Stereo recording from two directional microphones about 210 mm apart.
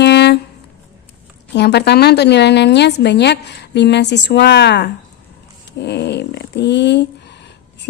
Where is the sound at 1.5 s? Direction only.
50° left (ahead or behind).